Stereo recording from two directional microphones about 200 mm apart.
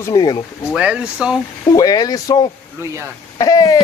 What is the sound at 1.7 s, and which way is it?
Speech, 20° left (ahead or behind).